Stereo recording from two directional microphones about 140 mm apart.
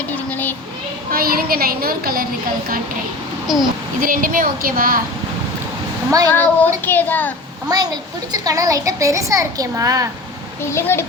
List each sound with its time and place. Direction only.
0.3 s child singing: 15° left (ahead or behind)
1.1 s a woman's voice: 90° right
3.4 s a child's voice: centre (ahead or behind)
4.0 s a woman's voice: 80° right
6.3 s child singing: 15° left (ahead or behind)
7.7 s a child's voice: 25° right (ahead or behind)
10.6 s a child's voice: 20° left (ahead or behind)